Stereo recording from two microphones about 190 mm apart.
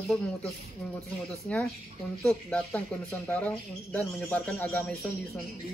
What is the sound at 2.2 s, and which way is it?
A man's voice, 5° left (ahead or behind).